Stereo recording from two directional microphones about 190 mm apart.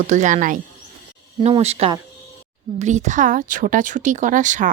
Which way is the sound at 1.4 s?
30° right (ahead or behind).